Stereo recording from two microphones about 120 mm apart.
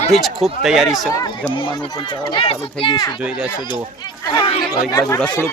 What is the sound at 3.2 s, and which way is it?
Speech, 10° right (ahead or behind).